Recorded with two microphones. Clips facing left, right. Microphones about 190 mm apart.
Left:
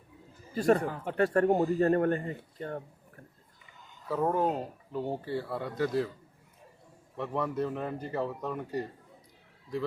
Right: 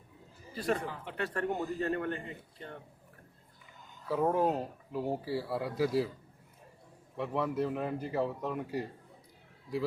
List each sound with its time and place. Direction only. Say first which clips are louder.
0.5 s speech: left 7 dB; 45° left (ahead or behind)
4.1 s a man's voice: even; 5° right (ahead or behind)
7.2 s a man's voice: left 1 dB; 5° right (ahead or behind)